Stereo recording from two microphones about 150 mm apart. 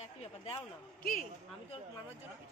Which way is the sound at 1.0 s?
70° left (ahead or behind).